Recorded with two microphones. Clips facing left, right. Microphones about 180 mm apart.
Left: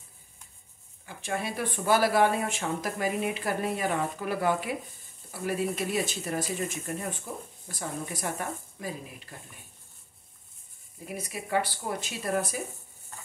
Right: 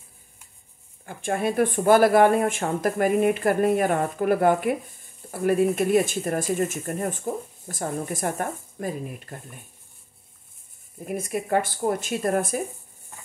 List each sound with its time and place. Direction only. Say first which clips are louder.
1.0 s speech: right 8 dB; 50° right (ahead or behind)
11.1 s speech: right 8 dB; 50° right (ahead or behind)